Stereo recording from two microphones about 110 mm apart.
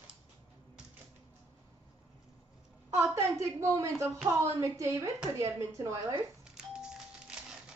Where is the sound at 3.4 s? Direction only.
30° right (ahead or behind).